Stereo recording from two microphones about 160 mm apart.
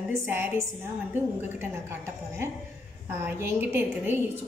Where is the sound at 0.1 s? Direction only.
15° right (ahead or behind).